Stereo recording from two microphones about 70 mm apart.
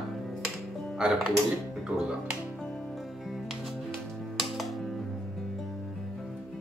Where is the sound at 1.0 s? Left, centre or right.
Centre.